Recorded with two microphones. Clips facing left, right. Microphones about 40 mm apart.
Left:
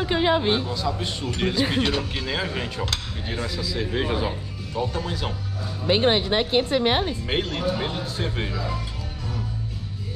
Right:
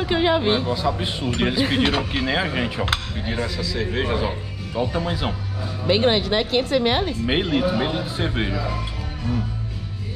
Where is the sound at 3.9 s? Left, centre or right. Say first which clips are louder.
Right 1 dB; centre.